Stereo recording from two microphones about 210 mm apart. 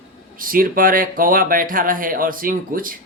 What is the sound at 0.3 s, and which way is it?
Speech, 40° right (ahead or behind).